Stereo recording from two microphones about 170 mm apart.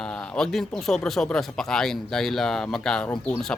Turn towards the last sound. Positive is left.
turn(degrees=5)  # may be behind; listen again after turning